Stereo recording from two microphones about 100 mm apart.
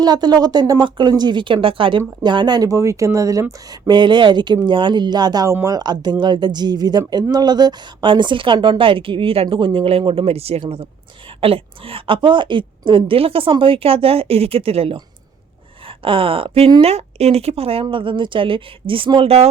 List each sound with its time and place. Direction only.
0.0 s speech: 40° right (ahead or behind)
3.7 s speech: 50° right (ahead or behind); by 10.6 s 90° right
11.3 s a woman's voice: 70° right (ahead or behind)
15.9 s speech: 65° right (ahead or behind)
16.8 s speech: 90° right; by 17.8 s 70° right (ahead or behind)
17.8 s speech: 60° right (ahead or behind); by 19.5 s 80° right